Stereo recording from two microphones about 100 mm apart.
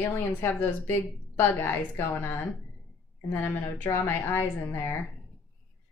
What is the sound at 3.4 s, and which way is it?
A woman's voice, 25° left (ahead or behind).